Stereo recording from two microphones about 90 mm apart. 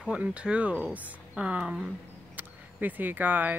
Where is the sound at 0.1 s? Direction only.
15° right (ahead or behind).